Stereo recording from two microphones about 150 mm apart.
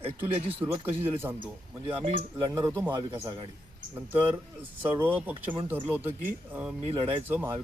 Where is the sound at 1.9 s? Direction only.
40° right (ahead or behind).